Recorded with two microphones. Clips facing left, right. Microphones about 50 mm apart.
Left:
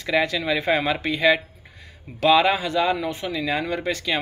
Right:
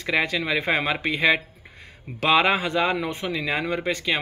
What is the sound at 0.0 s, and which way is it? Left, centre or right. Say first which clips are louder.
Speech: left 1 dB; right.